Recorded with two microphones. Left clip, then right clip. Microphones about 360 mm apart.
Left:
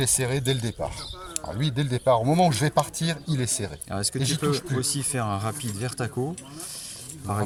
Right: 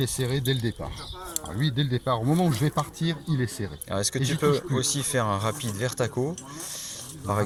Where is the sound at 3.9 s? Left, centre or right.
Centre.